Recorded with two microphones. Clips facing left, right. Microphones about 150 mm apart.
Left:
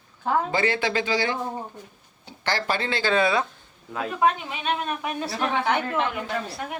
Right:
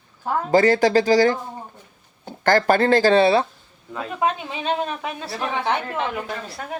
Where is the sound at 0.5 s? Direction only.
40° right (ahead or behind).